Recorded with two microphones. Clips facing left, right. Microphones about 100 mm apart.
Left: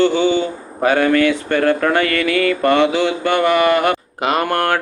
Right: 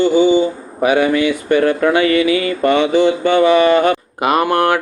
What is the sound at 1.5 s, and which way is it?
Speech, 50° left (ahead or behind).